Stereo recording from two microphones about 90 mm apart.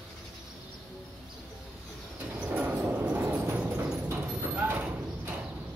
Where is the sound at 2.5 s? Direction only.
15° right (ahead or behind).